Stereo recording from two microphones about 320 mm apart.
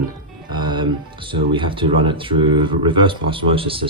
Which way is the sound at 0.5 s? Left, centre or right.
Centre.